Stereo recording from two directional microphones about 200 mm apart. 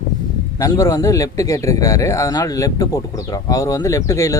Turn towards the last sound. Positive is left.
turn(degrees=15)  # may be behind; listen again after turning